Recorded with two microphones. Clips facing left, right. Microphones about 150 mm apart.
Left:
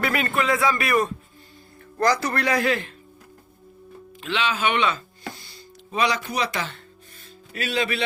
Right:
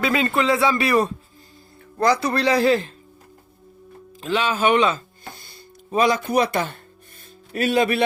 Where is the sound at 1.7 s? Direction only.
15° right (ahead or behind); by 2.9 s 30° right (ahead or behind).